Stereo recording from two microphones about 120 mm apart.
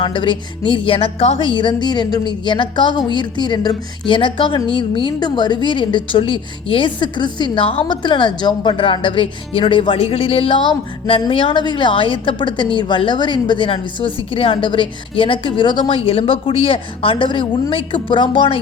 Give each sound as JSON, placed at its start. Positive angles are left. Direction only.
{"t": 0.0, "sound": "a woman's voice", "side_deg": 45}